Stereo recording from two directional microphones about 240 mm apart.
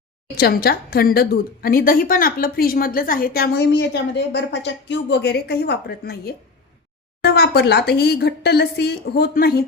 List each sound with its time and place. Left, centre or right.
0.3 s a woman's voice: left